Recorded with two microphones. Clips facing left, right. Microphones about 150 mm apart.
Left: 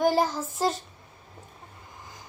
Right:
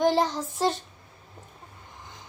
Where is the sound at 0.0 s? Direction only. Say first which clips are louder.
Even; 5° left (ahead or behind).